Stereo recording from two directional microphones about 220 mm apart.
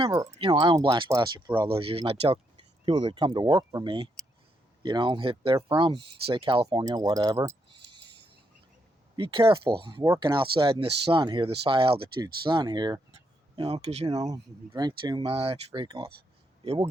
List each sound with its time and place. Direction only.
0.0 s speech: 15° right (ahead or behind)
9.1 s speech: 20° right (ahead or behind)
14.1 s speech: 15° right (ahead or behind)